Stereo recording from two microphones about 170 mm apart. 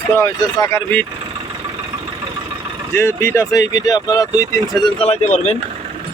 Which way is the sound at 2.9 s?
15° left (ahead or behind).